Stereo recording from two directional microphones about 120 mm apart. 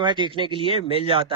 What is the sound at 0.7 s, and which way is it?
Speech, 55° left (ahead or behind).